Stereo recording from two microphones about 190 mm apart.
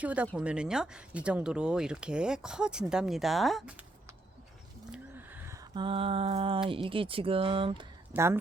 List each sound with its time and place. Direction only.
0.0 s speech: 5° right (ahead or behind)
4.9 s a sound: 10° right (ahead or behind)
5.7 s speech: 25° right (ahead or behind)
8.1 s a woman's voice: 15° right (ahead or behind)